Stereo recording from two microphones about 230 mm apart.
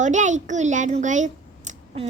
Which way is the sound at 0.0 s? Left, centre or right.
Right.